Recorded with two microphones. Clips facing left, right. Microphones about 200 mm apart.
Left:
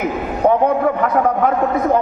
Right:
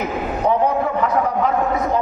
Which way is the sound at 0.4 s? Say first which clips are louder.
Left 4 dB; 55° left (ahead or behind).